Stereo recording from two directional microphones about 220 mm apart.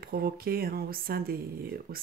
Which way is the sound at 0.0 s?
45° right (ahead or behind).